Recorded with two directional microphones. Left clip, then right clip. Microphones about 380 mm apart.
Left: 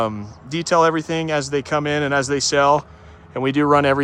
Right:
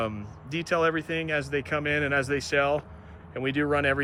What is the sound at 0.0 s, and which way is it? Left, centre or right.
Speech, centre.